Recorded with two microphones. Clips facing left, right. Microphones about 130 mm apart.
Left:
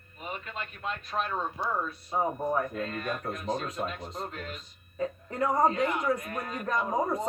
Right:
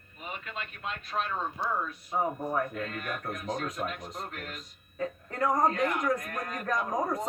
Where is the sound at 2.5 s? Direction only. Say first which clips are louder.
Left 1 dB; 30° left (ahead or behind).